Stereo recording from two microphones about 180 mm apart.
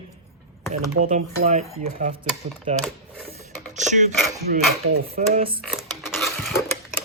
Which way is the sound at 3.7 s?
40° right (ahead or behind).